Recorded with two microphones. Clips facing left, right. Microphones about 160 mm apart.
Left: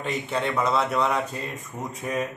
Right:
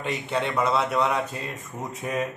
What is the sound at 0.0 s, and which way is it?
Speech, centre (ahead or behind).